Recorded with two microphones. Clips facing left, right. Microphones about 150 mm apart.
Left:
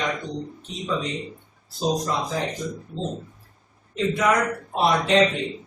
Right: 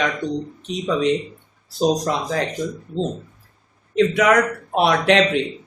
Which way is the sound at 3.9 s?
80° right.